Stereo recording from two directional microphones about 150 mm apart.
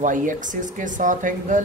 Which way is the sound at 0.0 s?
60° right (ahead or behind).